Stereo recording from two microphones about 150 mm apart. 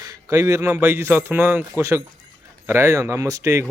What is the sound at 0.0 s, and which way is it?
Speech, 20° right (ahead or behind).